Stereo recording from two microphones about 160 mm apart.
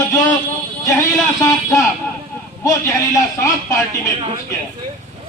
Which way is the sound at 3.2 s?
20° left (ahead or behind).